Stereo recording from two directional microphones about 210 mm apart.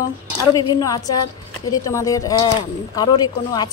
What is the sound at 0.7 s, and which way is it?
A woman's voice, 15° left (ahead or behind).